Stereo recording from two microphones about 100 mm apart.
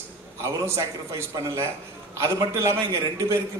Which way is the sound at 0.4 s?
30° right (ahead or behind).